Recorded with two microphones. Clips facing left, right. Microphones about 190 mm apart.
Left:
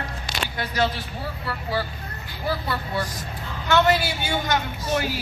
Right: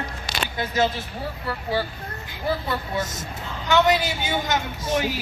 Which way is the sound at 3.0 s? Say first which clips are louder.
Right 1 dB; 25° right (ahead or behind).